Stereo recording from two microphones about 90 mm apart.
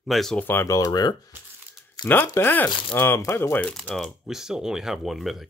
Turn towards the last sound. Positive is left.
turn(degrees=0)  # may be behind; listen again after turning